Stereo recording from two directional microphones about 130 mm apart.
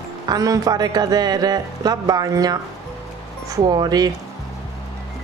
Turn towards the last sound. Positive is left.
turn(degrees=-30)  # may be behind; listen again after turning